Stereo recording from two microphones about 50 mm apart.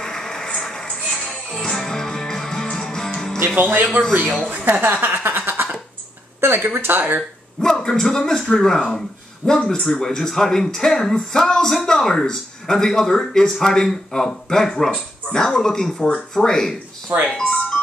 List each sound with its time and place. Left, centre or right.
0.0 s a sound: centre
0.6 s music: centre
4.0 s a woman's voice: right
5.0 s a sound: right
6.4 s speech: right
7.6 s speech: centre
17.4 s music: left